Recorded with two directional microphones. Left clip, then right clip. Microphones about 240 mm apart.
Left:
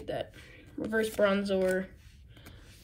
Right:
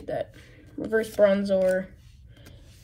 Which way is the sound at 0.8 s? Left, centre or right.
Centre.